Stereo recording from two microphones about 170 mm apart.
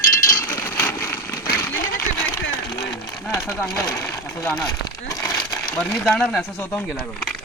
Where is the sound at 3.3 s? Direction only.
15° left (ahead or behind).